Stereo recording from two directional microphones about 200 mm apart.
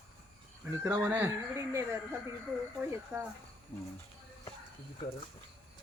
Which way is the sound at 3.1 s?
5° right (ahead or behind).